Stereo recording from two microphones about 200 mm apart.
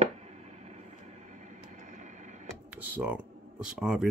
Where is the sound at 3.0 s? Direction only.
10° right (ahead or behind).